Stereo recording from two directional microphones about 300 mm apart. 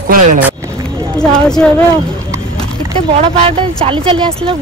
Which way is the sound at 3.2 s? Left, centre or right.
Centre.